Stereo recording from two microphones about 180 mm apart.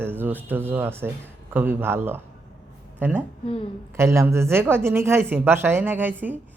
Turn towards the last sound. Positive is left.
turn(degrees=-10)  # may be behind; listen again after turning